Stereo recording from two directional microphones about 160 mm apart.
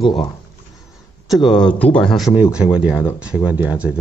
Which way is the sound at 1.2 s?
Centre (ahead or behind).